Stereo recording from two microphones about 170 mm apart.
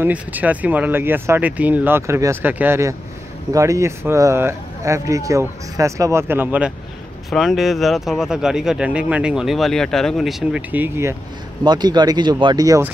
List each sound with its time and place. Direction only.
0.0 s speech: 10° right (ahead or behind)
11.6 s speech: 25° right (ahead or behind)